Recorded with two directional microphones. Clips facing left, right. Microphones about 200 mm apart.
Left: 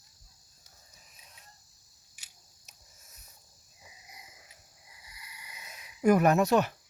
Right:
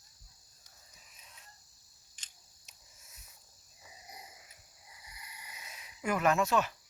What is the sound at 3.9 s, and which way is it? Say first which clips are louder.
Frog: right 5 dB; 35° right (ahead or behind).